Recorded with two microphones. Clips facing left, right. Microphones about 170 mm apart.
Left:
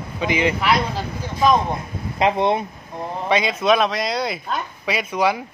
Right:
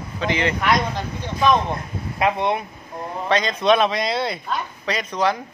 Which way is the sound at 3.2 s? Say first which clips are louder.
Even; 10° left (ahead or behind).